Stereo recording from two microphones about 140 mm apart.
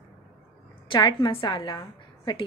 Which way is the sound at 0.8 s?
30° left (ahead or behind).